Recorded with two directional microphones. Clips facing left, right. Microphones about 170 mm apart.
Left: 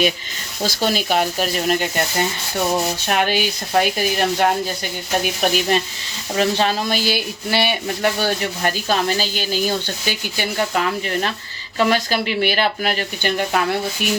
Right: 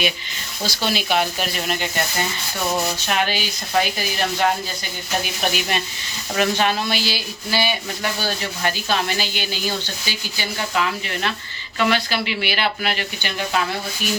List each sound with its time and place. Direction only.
0.6 s rub: 45° left (ahead or behind)
5.2 s speech: 40° left (ahead or behind)
6.3 s rub: 30° left (ahead or behind); by 13.7 s 50° left (ahead or behind)